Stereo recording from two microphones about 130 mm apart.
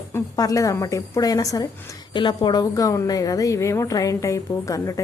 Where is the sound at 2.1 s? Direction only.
40° left (ahead or behind).